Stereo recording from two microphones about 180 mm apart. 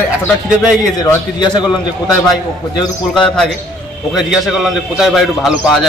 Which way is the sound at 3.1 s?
5° left (ahead or behind).